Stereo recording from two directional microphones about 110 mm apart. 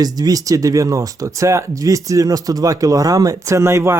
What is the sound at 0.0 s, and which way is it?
Speech, 35° right (ahead or behind).